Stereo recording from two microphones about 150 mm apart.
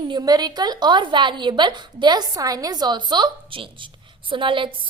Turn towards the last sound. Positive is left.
turn(degrees=-35)  # may be behind; listen again after turning